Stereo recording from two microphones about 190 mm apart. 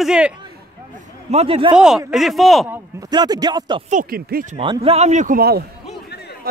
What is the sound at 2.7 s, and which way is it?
A man's voice, 15° right (ahead or behind).